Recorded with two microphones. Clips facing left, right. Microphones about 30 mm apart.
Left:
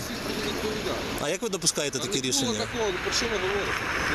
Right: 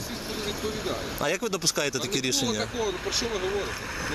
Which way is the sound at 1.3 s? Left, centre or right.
Centre.